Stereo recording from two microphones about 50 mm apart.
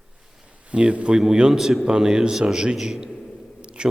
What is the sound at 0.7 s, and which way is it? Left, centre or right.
Speech, right.